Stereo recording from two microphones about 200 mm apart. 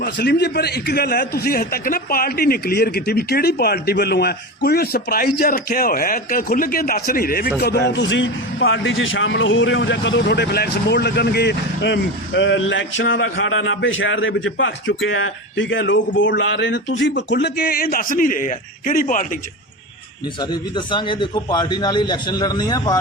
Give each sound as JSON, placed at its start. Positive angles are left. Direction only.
{"t": 0.0, "sound": "a man's voice", "side_deg": 55}
{"t": 7.9, "sound": "a man's voice", "side_deg": 65}
{"t": 20.4, "sound": "a man's voice", "side_deg": 20}